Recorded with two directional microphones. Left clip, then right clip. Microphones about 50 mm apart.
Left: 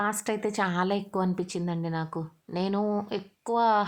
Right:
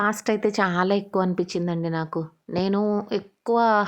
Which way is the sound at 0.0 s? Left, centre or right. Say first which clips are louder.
Right 6 dB; right.